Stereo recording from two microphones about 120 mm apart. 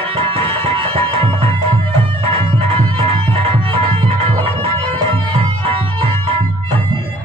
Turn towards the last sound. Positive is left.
turn(degrees=-50)  # may be behind; listen again after turning